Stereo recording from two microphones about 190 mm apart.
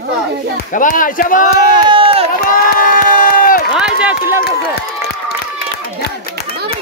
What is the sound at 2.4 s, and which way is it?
Crowd, 50° left (ahead or behind).